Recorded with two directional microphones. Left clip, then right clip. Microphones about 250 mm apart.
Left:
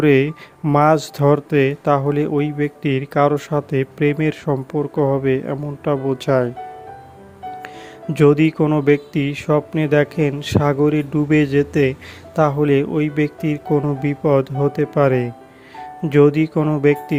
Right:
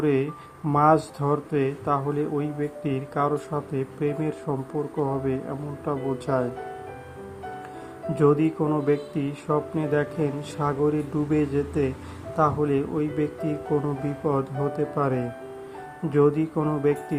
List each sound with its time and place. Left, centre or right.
0.0 s speech: left
8.1 s speech: left